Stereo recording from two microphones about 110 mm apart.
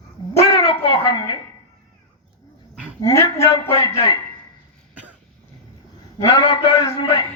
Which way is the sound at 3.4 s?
60° left (ahead or behind).